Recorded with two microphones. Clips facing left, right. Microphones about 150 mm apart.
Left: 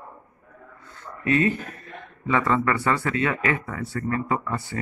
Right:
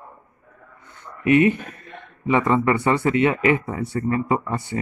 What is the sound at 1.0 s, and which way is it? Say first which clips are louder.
A man's voice: right 6 dB; 20° right (ahead or behind).